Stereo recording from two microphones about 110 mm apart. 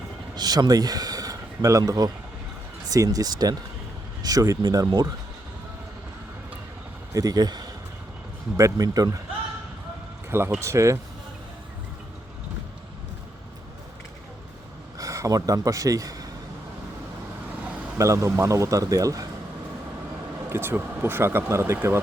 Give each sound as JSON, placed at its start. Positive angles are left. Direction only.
{"t": 0.3, "sound": "speech", "side_deg": -35}
{"t": 7.1, "sound": "speech", "side_deg": -35}
{"t": 10.2, "sound": "speech", "side_deg": -20}
{"t": 14.9, "sound": "a man's voice", "side_deg": -30}
{"t": 17.6, "sound": "vehicle", "side_deg": -10}
{"t": 17.9, "sound": "speech", "side_deg": -25}
{"t": 20.5, "sound": "speech", "side_deg": -20}